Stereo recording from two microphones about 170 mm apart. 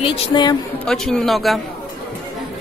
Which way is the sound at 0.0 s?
30° left (ahead or behind).